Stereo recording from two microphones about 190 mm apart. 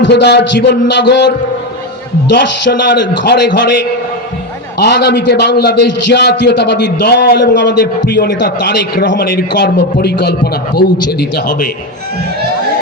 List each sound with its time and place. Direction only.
0.0 s a man's voice: 60° left (ahead or behind)
2.3 s a man's voice: 70° left (ahead or behind)
4.8 s a man's voice: 60° left (ahead or behind)